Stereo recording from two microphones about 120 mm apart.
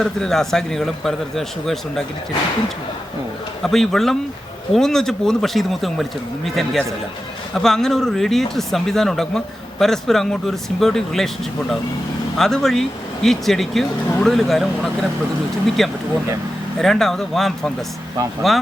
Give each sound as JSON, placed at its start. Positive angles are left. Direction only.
{"t": 0.0, "sound": "speech", "side_deg": 5}
{"t": 3.6, "sound": "speech", "side_deg": 0}
{"t": 12.4, "sound": "speech", "side_deg": 5}